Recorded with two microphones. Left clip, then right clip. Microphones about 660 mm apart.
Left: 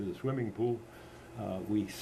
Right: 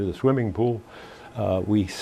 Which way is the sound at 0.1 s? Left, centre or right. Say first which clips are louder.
Right 14 dB; right.